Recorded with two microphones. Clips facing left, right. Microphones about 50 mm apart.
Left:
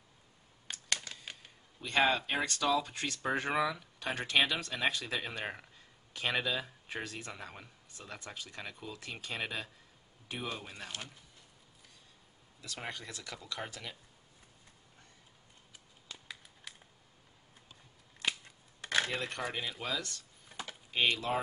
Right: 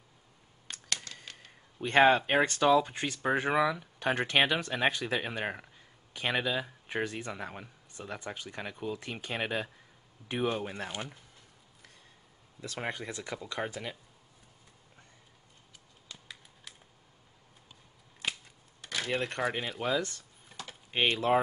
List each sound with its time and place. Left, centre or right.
1.3 s camera: centre
1.8 s speech: right; by 3.8 s centre
3.8 s speech: right
12.6 s speech: right
16.1 s a sound: centre
18.8 s a sound: left
19.0 s speech: right
19.8 s speech: right